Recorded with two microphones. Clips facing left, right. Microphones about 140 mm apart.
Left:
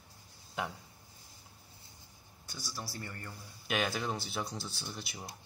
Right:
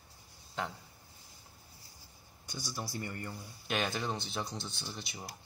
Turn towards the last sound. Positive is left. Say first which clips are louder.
# even
turn(degrees=0)  # may be behind; listen again after turning